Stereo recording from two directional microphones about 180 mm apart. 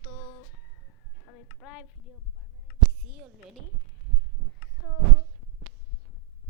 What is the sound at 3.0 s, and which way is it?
Speech, 5° right (ahead or behind).